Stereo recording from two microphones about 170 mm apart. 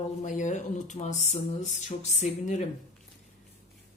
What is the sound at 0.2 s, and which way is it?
Speech, 45° left (ahead or behind).